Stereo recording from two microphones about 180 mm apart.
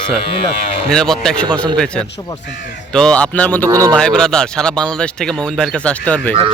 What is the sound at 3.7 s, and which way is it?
Speech, 20° right (ahead or behind).